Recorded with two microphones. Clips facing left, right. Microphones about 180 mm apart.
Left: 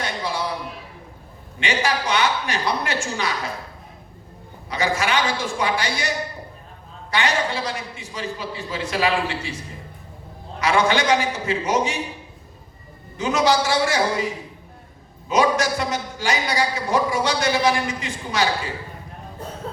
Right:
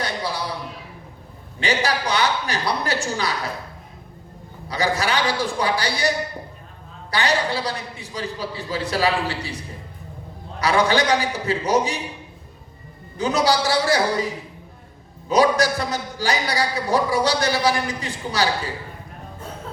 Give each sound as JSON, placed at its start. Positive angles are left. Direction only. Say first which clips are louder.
{"t": 0.0, "sound": "a sound", "louder": "even", "side_deg": -35}
{"t": 1.5, "sound": "a man's voice", "louder": "right 1 dB", "side_deg": -35}
{"t": 4.7, "sound": "a man's voice", "louder": "even", "side_deg": -35}
{"t": 7.1, "sound": "a man's voice", "louder": "right 1 dB", "side_deg": -35}
{"t": 10.6, "sound": "a man's voice", "louder": "right 1 dB", "side_deg": -35}
{"t": 13.1, "sound": "a man's voice", "louder": "even", "side_deg": -35}
{"t": 15.3, "sound": "a man's voice", "louder": "right 2 dB", "side_deg": -35}